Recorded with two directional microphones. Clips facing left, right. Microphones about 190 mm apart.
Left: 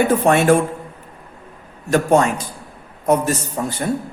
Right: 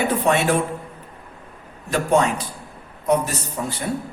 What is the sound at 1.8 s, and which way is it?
A man's voice, 45° left (ahead or behind).